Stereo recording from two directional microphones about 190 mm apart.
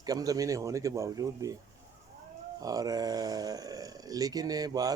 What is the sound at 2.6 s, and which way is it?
Speech, 20° right (ahead or behind).